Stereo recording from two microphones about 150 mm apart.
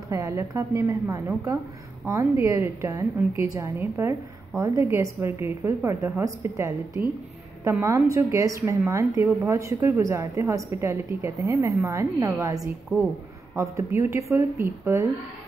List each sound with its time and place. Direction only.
0.1 s a woman's voice: 20° right (ahead or behind)